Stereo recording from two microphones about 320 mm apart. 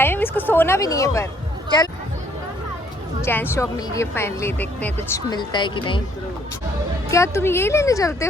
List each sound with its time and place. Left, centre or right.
0.0 s speech: centre
3.2 s speech: centre
7.1 s speech: centre